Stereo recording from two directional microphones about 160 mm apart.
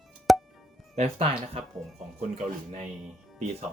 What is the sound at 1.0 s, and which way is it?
Speech, 40° right (ahead or behind).